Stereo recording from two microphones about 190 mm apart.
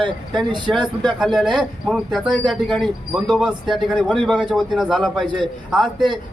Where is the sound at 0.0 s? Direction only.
25° right (ahead or behind).